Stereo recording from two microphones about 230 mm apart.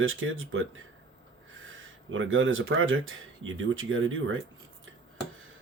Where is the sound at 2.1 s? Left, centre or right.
Right.